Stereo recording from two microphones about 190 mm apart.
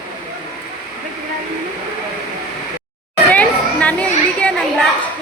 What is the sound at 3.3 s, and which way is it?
Chatter, 5° left (ahead or behind).